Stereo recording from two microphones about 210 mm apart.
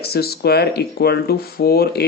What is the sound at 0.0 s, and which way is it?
Speech, 50° left (ahead or behind).